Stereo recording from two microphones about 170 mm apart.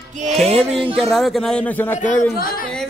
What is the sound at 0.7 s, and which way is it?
Speech, 30° right (ahead or behind).